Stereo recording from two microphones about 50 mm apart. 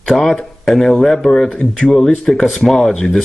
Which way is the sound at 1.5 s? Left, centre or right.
Left.